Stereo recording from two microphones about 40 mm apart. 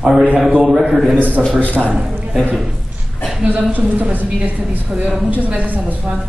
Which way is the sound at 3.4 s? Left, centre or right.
Right.